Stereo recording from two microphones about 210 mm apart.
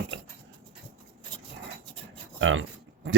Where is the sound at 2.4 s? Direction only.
65° right (ahead or behind).